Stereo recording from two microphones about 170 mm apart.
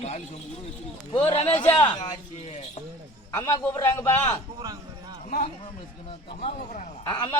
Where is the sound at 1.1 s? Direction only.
35° left (ahead or behind).